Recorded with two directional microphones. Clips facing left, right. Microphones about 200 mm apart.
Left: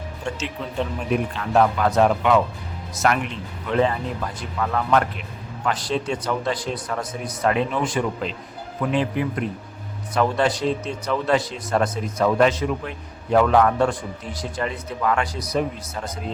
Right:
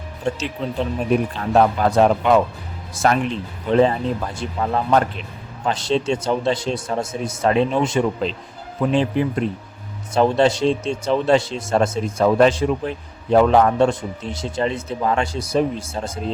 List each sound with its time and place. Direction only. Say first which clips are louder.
0.3 s a man's voice: right 6 dB; 35° right (ahead or behind)